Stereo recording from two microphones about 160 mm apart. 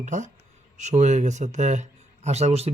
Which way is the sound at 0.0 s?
50° right (ahead or behind).